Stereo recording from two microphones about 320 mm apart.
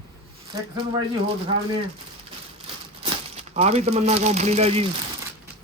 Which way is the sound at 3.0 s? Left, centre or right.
Right.